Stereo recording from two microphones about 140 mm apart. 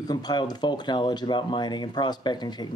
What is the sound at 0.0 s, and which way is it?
Speech, 30° left (ahead or behind).